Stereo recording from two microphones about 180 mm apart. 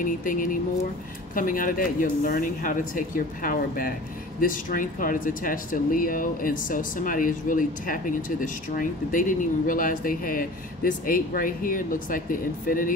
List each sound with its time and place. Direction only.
0.0 s speech: 50° left (ahead or behind)